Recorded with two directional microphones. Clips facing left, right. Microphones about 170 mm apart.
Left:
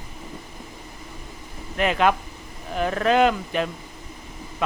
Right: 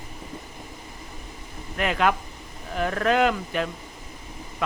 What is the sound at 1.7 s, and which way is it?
Speech, 20° left (ahead or behind).